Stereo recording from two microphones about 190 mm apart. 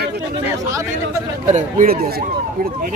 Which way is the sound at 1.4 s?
40° right (ahead or behind).